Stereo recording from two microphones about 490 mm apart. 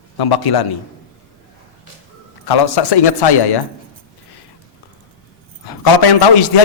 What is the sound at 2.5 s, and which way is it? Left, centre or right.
A man's voice, left.